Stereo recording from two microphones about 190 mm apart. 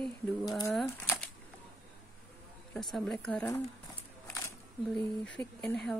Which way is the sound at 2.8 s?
Centre (ahead or behind).